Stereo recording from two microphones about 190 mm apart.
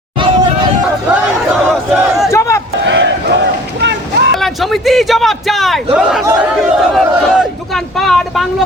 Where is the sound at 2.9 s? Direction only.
70° right (ahead or behind).